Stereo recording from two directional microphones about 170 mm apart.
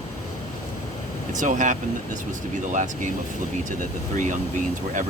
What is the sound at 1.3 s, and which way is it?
Speech, 50° right (ahead or behind).